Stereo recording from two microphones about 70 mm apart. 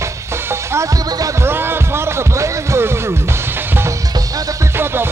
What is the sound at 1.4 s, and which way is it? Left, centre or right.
Music, right.